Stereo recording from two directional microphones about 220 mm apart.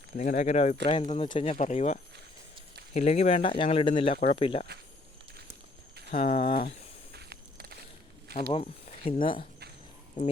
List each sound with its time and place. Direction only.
0.2 s speech: 35° left (ahead or behind)
6.1 s speech: 25° left (ahead or behind)
7.1 s walk: 45° right (ahead or behind)
8.4 s speech: 25° left (ahead or behind)